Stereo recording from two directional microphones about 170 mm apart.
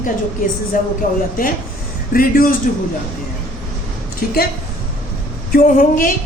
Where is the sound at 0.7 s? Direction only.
50° left (ahead or behind).